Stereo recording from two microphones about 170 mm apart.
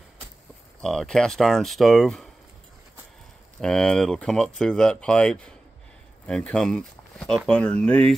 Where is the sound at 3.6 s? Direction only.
5° left (ahead or behind).